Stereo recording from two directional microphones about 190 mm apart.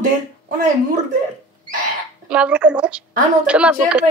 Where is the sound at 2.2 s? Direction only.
5° right (ahead or behind).